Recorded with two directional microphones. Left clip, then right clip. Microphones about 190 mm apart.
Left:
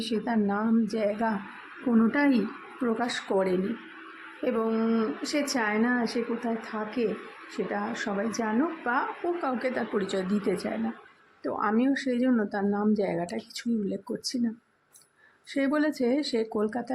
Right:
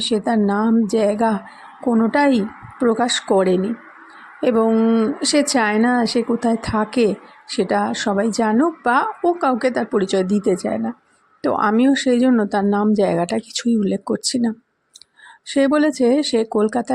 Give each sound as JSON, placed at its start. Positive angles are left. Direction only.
{"t": 0.0, "sound": "speech", "side_deg": -30}
{"t": 15.4, "sound": "speech", "side_deg": -30}